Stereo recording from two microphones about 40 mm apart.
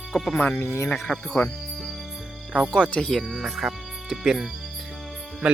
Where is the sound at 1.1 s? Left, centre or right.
Centre.